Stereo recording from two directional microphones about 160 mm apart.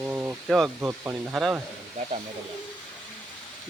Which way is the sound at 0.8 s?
10° right (ahead or behind).